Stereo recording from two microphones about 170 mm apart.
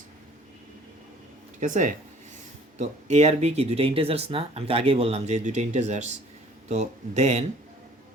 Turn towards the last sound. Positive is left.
turn(degrees=-45)  # may be behind; listen again after turning